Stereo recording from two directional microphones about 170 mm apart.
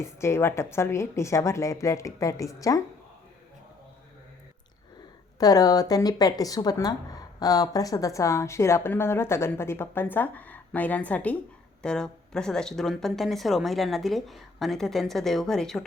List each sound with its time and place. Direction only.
0.0 s a woman's voice: 15° left (ahead or behind)
5.4 s a woman's voice: 20° left (ahead or behind); by 15.8 s 5° left (ahead or behind)